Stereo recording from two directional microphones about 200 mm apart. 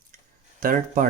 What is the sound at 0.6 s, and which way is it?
Speech, 40° right (ahead or behind).